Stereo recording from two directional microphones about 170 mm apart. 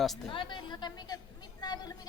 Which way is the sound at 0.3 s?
30° left (ahead or behind).